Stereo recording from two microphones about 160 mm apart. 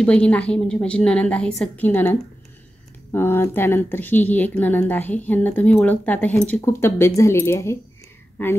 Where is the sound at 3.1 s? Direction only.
15° left (ahead or behind).